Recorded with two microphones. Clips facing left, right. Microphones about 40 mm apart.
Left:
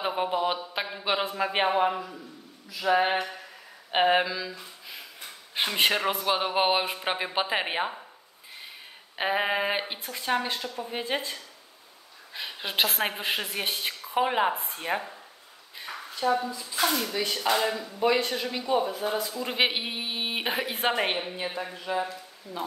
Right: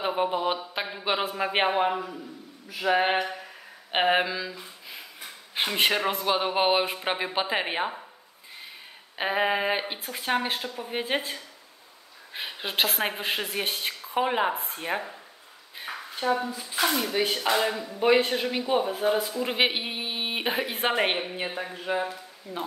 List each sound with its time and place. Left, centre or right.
0.0 s a sound: centre
0.9 s a man's voice: centre
1.3 s a man's voice: centre
9.2 s a woman's voice: centre
10.1 s a man's voice: centre
12.4 s a woman's voice: centre
15.8 s a sound: right
16.4 s speech: right
16.9 s a man's voice: right
19.4 s a woman's voice: centre
21.7 s speech: right